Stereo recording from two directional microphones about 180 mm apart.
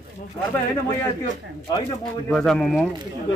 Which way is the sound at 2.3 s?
5° left (ahead or behind).